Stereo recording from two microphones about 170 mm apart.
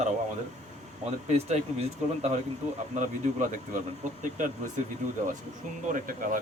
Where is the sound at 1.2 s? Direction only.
40° right (ahead or behind).